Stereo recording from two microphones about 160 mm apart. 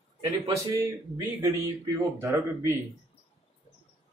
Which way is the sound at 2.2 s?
15° right (ahead or behind).